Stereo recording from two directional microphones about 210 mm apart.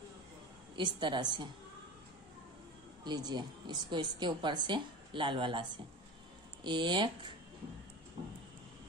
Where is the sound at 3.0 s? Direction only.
20° right (ahead or behind).